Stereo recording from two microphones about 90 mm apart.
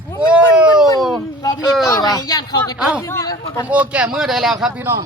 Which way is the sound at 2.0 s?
45° left (ahead or behind).